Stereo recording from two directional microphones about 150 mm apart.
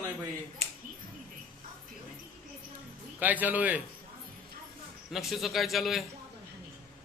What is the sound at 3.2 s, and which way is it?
Speech, 10° right (ahead or behind).